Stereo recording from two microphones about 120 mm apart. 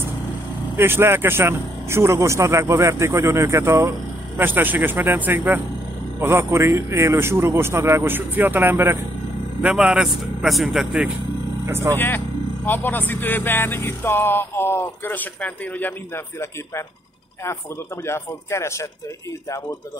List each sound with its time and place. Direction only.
0.7 s speech: 20° right (ahead or behind); by 11.1 s 5° right (ahead or behind)
11.6 s speech: 25° right (ahead or behind)
12.6 s speech: 15° left (ahead or behind)
18.0 s speech: 20° left (ahead or behind)